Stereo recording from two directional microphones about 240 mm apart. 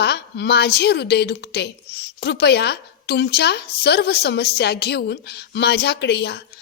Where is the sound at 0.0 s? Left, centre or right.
Left.